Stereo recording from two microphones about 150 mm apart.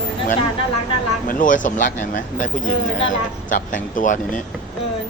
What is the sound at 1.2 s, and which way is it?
Speech, 60° left (ahead or behind).